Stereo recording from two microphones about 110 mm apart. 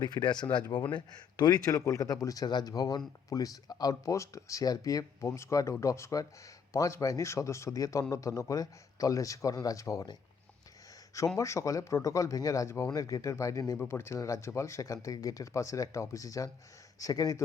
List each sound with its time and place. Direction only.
0.0 s speech: 40° left (ahead or behind)
11.3 s speech: 30° left (ahead or behind)